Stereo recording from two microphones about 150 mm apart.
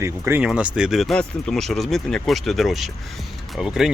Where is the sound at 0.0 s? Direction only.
15° right (ahead or behind).